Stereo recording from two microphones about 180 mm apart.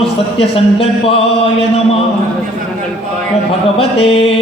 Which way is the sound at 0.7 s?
35° left (ahead or behind).